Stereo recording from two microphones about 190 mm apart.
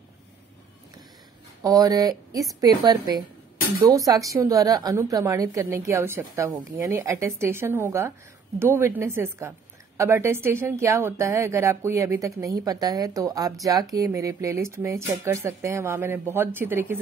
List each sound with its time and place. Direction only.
1.6 s a woman's voice: 20° right (ahead or behind)